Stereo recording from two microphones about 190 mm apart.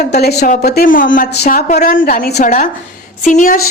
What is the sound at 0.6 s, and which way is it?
A woman's voice, 55° left (ahead or behind).